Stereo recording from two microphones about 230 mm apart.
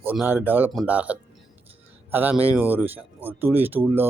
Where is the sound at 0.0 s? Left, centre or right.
Centre.